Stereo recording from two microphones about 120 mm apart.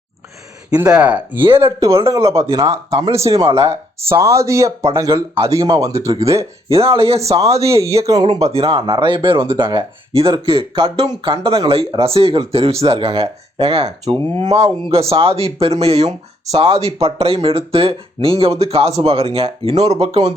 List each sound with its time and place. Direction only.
0.8 s speech: 10° right (ahead or behind); by 3.4 s 25° right (ahead or behind)
3.4 s speech: 55° right (ahead or behind)
3.7 s speech: 25° right (ahead or behind)
6.9 s speech: 50° right (ahead or behind)
8.0 s speech: 35° right (ahead or behind)
8.5 s speech: 55° right (ahead or behind)